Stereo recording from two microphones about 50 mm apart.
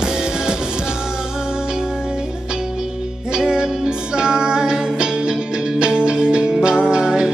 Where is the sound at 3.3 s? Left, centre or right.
Centre.